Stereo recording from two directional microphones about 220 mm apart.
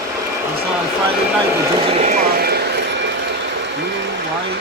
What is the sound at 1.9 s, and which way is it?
Vehicle, 30° right (ahead or behind).